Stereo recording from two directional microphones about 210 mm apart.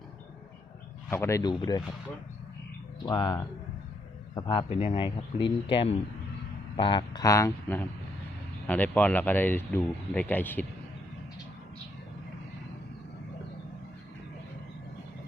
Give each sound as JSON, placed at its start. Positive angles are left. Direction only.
{"t": 1.1, "sound": "speech", "side_deg": 15}
{"t": 3.1, "sound": "speech", "side_deg": 20}